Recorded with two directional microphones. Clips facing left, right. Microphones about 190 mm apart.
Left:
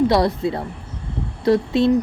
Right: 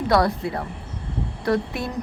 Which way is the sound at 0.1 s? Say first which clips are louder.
Left 2 dB; 25° left (ahead or behind).